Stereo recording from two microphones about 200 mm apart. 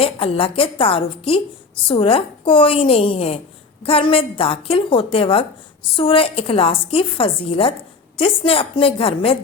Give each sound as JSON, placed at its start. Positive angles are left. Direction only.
{"t": 0.0, "sound": "a woman's voice", "side_deg": 30}